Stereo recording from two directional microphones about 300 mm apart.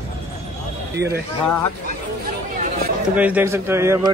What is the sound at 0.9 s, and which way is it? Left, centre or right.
Speech, right.